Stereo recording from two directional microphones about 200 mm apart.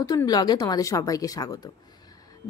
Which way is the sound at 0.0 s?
20° left (ahead or behind).